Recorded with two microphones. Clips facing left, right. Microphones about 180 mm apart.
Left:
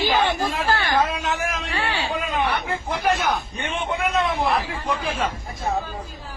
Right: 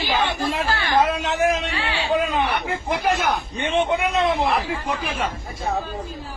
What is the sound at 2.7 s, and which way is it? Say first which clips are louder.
Speech: right 2 dB; 15° right (ahead or behind).